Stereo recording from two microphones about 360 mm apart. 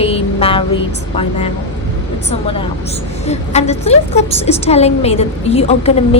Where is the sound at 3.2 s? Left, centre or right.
Centre.